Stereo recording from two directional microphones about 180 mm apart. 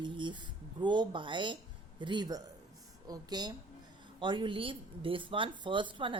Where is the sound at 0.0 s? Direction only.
25° right (ahead or behind).